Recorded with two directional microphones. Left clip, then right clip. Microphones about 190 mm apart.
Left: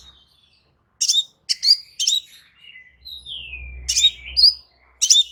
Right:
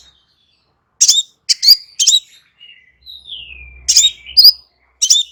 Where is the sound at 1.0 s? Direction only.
20° right (ahead or behind).